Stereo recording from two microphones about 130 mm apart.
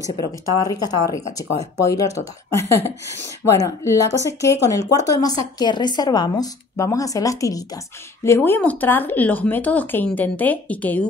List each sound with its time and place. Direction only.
0.1 s speech: 30° left (ahead or behind)
3.4 s speech: 25° left (ahead or behind)